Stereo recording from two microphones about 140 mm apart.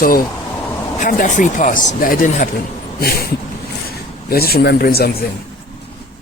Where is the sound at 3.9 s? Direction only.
90° left.